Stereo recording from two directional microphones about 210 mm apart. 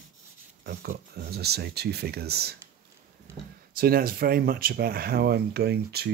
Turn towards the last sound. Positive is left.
turn(degrees=-50)  # may be behind; listen again after turning